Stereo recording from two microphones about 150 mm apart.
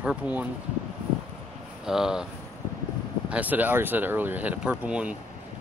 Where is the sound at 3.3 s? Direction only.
10° right (ahead or behind).